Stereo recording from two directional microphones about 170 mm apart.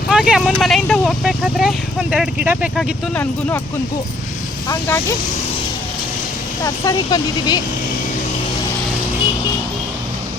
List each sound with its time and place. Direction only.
0.1 s speech: 5° right (ahead or behind)
4.7 s speech: 15° left (ahead or behind)
6.8 s speech: 25° left (ahead or behind)